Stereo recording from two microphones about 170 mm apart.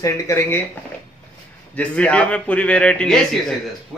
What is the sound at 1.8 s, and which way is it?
Speech, 10° left (ahead or behind).